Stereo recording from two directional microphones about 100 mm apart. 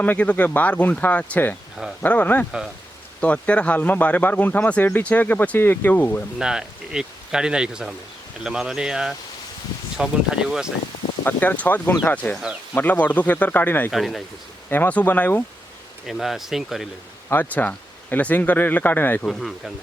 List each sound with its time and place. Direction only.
0.0 s speech: 15° left (ahead or behind)
6.4 s speech: 5° right (ahead or behind)
11.2 s speech: 20° left (ahead or behind)
13.9 s speech: centre (ahead or behind)
14.7 s speech: 20° left (ahead or behind)
16.0 s speech: centre (ahead or behind)
17.2 s speech: 20° left (ahead or behind)
19.3 s speech: centre (ahead or behind)